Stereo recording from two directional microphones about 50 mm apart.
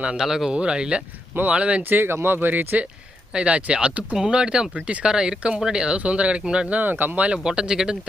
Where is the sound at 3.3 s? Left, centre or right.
Right.